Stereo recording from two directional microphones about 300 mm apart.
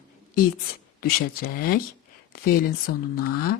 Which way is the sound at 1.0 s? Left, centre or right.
Left.